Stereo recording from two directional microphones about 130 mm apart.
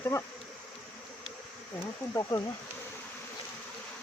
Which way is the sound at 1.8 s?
20° left (ahead or behind).